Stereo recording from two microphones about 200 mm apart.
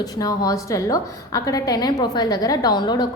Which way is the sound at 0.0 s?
20° left (ahead or behind).